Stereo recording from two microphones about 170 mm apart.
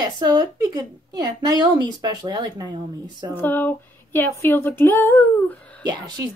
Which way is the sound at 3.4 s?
10° left (ahead or behind).